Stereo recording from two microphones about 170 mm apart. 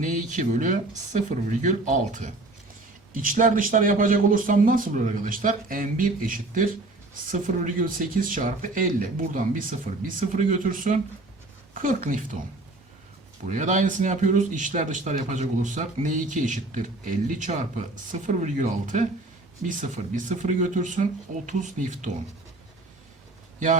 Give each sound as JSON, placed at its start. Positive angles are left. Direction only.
{"t": 0.0, "sound": "a man's voice", "side_deg": -45}
{"t": 13.5, "sound": "a man's voice", "side_deg": -45}